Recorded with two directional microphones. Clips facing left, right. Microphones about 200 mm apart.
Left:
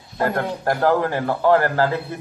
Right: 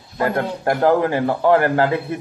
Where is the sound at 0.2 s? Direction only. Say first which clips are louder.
Right 2 dB; 20° right (ahead or behind).